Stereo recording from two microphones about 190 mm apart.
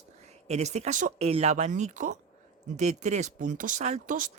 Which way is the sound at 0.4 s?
35° right (ahead or behind).